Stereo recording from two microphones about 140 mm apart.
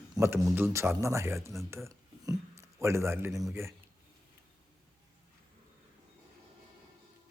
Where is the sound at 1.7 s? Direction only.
20° right (ahead or behind).